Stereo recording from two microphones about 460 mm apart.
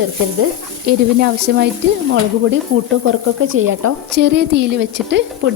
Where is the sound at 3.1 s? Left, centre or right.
Right.